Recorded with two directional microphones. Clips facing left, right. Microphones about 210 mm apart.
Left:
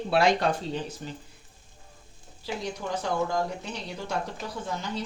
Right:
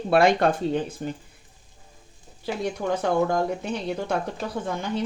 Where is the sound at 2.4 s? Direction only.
55° right (ahead or behind).